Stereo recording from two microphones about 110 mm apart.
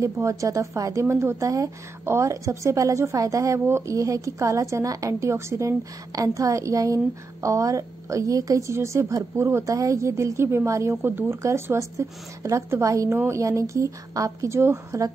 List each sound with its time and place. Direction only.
0.0 s a woman's voice: 30° right (ahead or behind)